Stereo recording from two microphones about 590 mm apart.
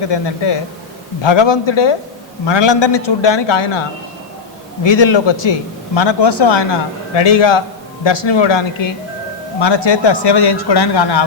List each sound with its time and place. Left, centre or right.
0.1 s a man's voice: left